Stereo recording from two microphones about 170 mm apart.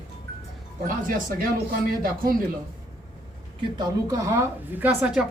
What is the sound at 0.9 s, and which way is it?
Speech, 55° right (ahead or behind).